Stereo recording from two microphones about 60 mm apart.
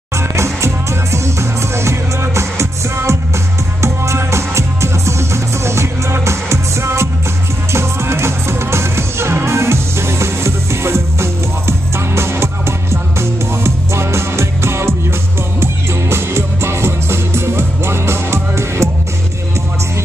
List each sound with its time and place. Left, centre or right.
0.4 s music: right